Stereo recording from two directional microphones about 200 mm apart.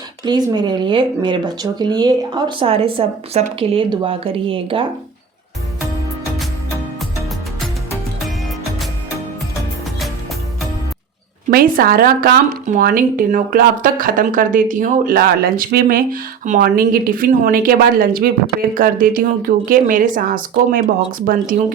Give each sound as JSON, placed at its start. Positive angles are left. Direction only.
{"t": 0.3, "sound": "speech", "side_deg": -20}
{"t": 11.5, "sound": "speech", "side_deg": -45}